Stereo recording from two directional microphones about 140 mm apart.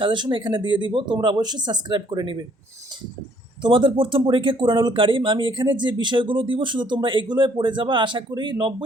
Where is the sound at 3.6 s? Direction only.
35° right (ahead or behind).